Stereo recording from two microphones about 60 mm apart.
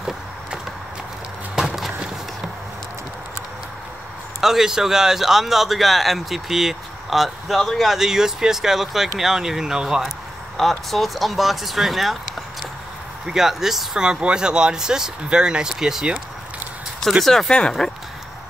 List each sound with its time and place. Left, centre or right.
4.4 s speech: centre
10.6 s speech: centre
17.2 s speech: centre
17.5 s speech: centre